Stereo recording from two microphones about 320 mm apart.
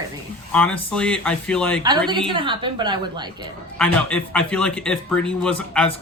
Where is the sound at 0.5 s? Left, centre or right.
Centre.